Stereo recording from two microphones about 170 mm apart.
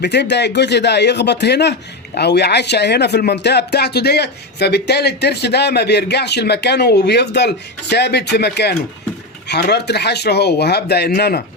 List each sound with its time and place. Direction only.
0.0 s speech: 85° left; by 11.4 s 65° left (ahead or behind)